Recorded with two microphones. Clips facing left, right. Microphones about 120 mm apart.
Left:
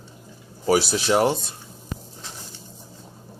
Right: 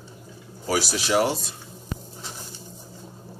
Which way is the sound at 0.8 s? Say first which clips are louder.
Left 2 dB; 25° left (ahead or behind).